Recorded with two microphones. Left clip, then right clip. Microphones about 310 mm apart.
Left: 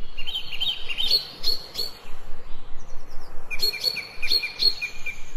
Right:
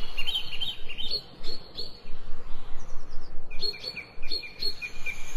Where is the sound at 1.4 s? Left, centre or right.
Left.